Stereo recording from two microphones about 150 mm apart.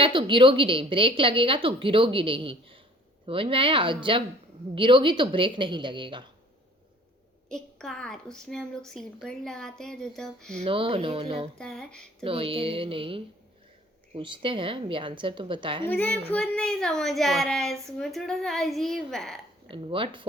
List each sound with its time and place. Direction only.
0.0 s a woman's voice: 35° right (ahead or behind)
7.5 s a woman's voice: 5° left (ahead or behind)
10.6 s a woman's voice: 35° right (ahead or behind)
11.5 s a woman's voice: 5° left (ahead or behind)
12.2 s a woman's voice: 40° right (ahead or behind)
15.9 s a woman's voice: 10° left (ahead or behind)
19.6 s a woman's voice: 35° right (ahead or behind)